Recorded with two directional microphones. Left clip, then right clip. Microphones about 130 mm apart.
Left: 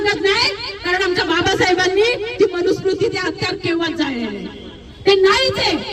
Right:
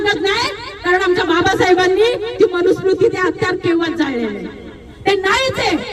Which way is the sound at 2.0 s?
30° right (ahead or behind).